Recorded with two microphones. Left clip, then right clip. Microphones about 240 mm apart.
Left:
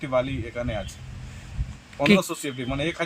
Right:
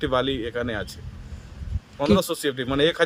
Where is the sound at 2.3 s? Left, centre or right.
Centre.